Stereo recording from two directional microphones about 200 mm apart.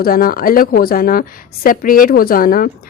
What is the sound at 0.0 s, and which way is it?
A woman's voice, 45° left (ahead or behind).